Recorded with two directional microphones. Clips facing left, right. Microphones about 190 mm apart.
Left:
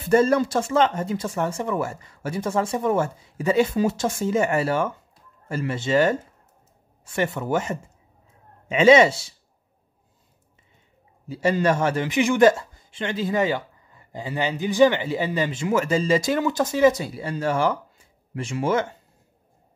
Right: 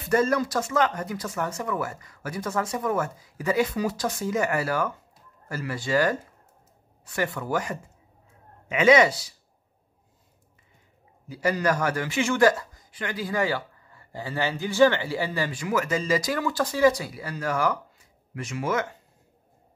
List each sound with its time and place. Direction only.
0.1 s a man's voice: 30° left (ahead or behind)
7.2 s a man's voice: 25° left (ahead or behind)
11.2 s a man's voice: 25° left (ahead or behind)